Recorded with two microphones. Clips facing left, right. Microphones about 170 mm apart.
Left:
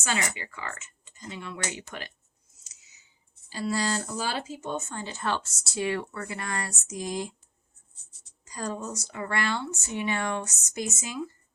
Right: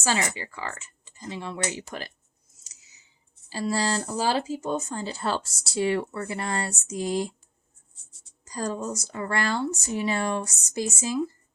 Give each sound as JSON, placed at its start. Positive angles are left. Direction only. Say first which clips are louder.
{"t": 0.0, "sound": "speech", "louder": "right 4 dB", "side_deg": -30}
{"t": 3.5, "sound": "speech", "louder": "right 2 dB", "side_deg": -35}
{"t": 8.4, "sound": "speech", "louder": "right 4 dB", "side_deg": -35}